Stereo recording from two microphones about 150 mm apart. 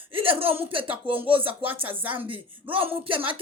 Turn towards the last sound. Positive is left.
turn(degrees=-35)  # may be behind; listen again after turning